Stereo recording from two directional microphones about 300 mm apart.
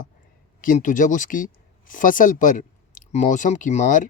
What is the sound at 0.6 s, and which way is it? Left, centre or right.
Speech, left.